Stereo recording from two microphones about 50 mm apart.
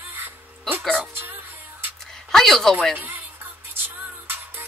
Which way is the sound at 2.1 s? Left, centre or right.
Centre.